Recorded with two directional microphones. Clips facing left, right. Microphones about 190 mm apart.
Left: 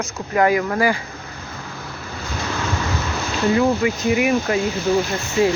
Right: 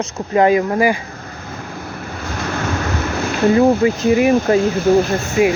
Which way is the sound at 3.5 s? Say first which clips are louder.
Right 5 dB; 35° right (ahead or behind).